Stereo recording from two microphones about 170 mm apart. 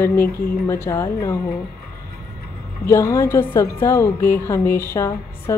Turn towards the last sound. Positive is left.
turn(degrees=15)  # may be behind; listen again after turning